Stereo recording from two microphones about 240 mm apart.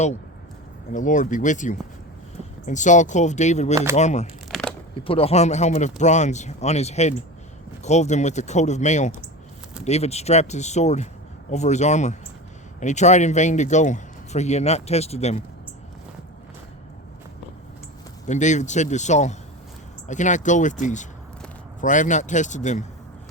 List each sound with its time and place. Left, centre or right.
0.9 s a man's voice: left
18.3 s a man's voice: left